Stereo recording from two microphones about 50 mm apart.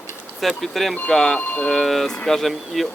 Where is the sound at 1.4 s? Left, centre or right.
Left.